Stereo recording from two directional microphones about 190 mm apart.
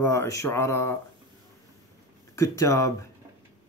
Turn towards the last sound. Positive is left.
turn(degrees=15)  # may be behind; listen again after turning